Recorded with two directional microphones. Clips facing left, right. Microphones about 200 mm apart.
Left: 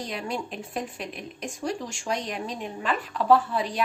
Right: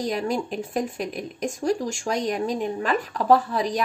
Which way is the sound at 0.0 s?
45° right (ahead or behind).